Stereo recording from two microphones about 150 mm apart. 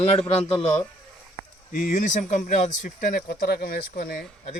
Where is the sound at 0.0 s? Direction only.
40° left (ahead or behind).